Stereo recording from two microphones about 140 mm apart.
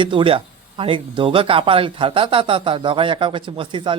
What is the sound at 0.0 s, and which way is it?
Speech, 35° right (ahead or behind).